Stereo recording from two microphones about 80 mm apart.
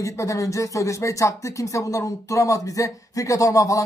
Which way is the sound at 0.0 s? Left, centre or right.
Left.